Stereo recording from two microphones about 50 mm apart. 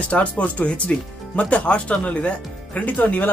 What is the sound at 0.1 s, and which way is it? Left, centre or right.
Speech, left.